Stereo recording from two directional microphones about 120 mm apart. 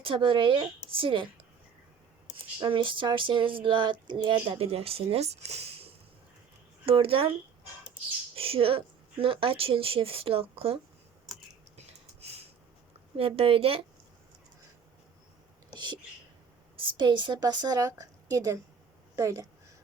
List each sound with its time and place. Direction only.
0.0 s speech: 45° right (ahead or behind)
2.3 s speech: 45° right (ahead or behind); by 5.9 s 60° right (ahead or behind)
6.8 s speech: 50° right (ahead or behind)
8.4 s speech: 50° right (ahead or behind)
11.3 s typing: centre (ahead or behind)
12.2 s a sound: 60° right (ahead or behind)
13.1 s speech: 50° right (ahead or behind)
15.7 s a sound: 40° right (ahead or behind)
16.7 s a woman's voice: 40° right (ahead or behind); by 19.5 s 25° right (ahead or behind)